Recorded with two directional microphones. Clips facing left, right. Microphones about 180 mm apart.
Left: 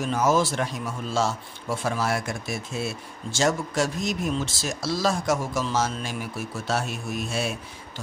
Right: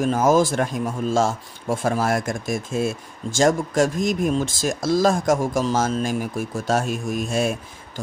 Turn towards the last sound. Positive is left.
turn(degrees=-50)  # may be behind; listen again after turning